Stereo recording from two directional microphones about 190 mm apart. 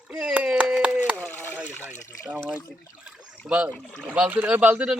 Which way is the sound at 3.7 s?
5° left (ahead or behind).